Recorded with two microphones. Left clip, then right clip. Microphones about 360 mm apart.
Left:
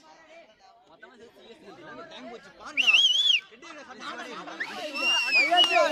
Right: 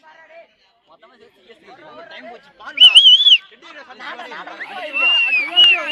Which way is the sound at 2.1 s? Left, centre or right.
Right.